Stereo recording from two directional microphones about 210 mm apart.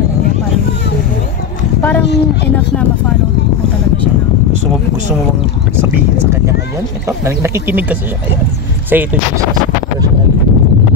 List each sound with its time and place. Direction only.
1.8 s a sound: 5° left (ahead or behind)
2.0 s speech: 55° left (ahead or behind)
7.1 s speech: 10° right (ahead or behind)